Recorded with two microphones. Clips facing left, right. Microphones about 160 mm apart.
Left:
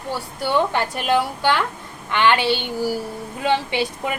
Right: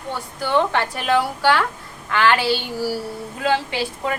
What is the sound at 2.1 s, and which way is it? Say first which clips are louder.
Speech: even; 25° left (ahead or behind).